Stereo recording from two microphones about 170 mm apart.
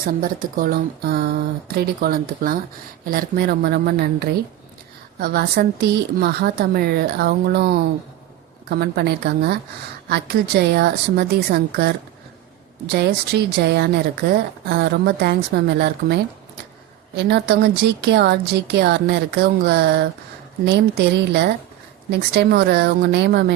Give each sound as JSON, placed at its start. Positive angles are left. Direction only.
{"t": 0.2, "sound": "a woman's voice", "side_deg": -55}
{"t": 22.1, "sound": "speech", "side_deg": -75}